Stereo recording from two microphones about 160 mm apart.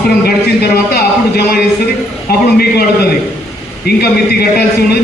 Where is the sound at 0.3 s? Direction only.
80° left.